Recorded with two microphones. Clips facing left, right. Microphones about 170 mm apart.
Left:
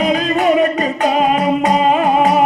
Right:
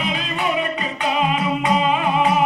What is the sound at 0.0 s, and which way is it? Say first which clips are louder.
Music: left 9 dB; 45° left (ahead or behind).